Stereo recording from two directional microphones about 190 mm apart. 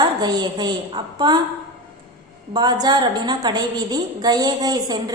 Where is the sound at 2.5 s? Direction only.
20° right (ahead or behind).